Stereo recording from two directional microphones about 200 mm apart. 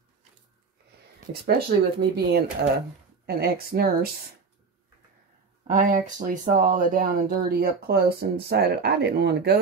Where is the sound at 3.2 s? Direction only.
50° right (ahead or behind).